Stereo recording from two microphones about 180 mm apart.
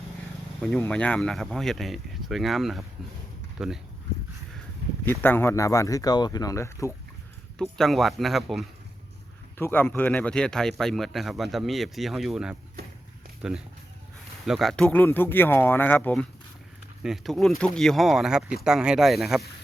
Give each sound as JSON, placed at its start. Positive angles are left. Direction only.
{"t": 0.8, "sound": "speech", "side_deg": 5}
{"t": 5.0, "sound": "speech", "side_deg": 10}
{"t": 7.6, "sound": "speech", "side_deg": 0}
{"t": 9.6, "sound": "speech", "side_deg": 10}
{"t": 14.4, "sound": "speech", "side_deg": 0}
{"t": 17.0, "sound": "speech", "side_deg": 0}